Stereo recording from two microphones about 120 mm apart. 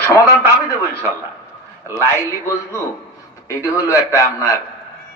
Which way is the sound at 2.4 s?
25° left (ahead or behind).